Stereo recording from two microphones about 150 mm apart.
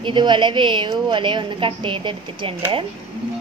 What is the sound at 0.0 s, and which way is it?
A woman's voice, 30° right (ahead or behind).